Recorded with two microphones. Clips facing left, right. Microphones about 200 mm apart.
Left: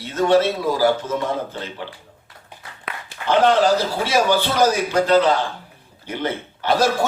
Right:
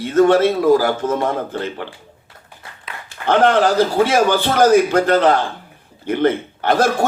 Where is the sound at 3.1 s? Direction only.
55° right (ahead or behind).